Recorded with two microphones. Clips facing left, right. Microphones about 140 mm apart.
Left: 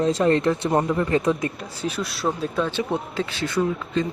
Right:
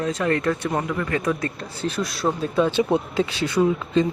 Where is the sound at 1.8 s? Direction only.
5° left (ahead or behind).